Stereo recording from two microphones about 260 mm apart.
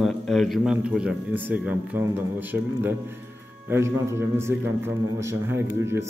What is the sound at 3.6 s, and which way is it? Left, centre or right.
Speech, centre.